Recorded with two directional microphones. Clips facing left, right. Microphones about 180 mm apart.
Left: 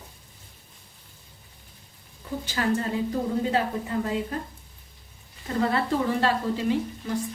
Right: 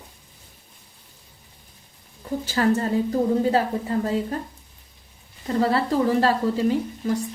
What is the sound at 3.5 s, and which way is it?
Speech, 40° right (ahead or behind).